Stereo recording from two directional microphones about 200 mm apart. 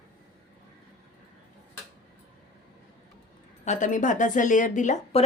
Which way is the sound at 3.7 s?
40° left (ahead or behind).